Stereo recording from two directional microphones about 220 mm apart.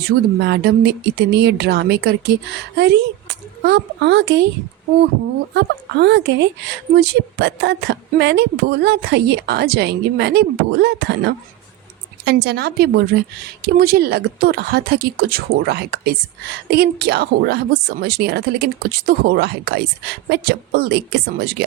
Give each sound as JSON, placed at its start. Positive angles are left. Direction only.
{"t": 0.3, "sound": "speech", "side_deg": -50}
{"t": 5.5, "sound": "speech", "side_deg": -50}